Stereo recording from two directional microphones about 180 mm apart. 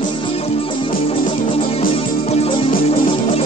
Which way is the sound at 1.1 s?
30° left (ahead or behind).